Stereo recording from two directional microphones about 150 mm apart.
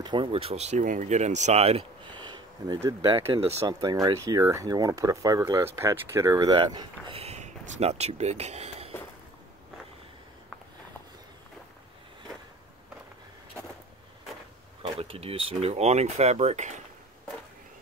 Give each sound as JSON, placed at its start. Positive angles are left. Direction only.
{"t": 0.0, "sound": "speech", "side_deg": -30}
{"t": 3.3, "sound": "speech", "side_deg": -45}
{"t": 3.6, "sound": "speech", "side_deg": -25}
{"t": 14.8, "sound": "speech", "side_deg": -40}